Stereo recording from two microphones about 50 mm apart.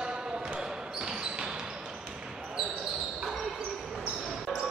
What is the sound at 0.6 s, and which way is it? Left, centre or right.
Basketball bounce, centre.